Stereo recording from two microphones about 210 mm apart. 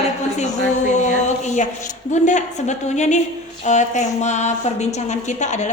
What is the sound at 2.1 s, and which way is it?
A woman's voice, 35° left (ahead or behind).